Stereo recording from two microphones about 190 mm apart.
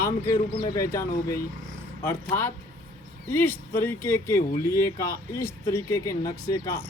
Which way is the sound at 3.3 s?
10° left (ahead or behind).